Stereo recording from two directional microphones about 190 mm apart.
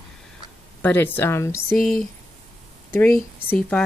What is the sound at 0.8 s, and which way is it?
Speech, 10° left (ahead or behind).